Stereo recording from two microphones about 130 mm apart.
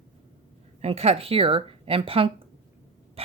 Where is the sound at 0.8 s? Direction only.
50° right (ahead or behind).